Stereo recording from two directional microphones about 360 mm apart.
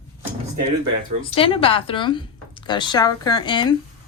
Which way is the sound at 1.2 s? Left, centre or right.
Centre.